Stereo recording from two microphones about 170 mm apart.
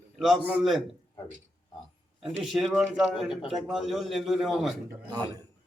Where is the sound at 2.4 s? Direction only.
Centre (ahead or behind).